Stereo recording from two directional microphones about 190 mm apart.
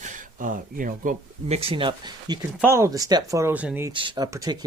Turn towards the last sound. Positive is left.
turn(degrees=-20)  # may be behind; listen again after turning